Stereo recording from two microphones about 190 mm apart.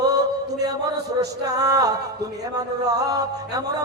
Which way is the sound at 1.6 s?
20° right (ahead or behind).